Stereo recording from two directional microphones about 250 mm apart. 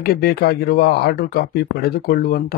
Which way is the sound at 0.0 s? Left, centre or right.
Left.